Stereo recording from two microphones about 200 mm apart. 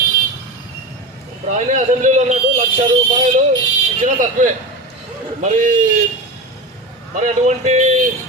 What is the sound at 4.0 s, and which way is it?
Speech, 40° right (ahead or behind).